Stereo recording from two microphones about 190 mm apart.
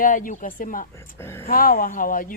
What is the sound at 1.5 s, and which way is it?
Speech, 50° left (ahead or behind).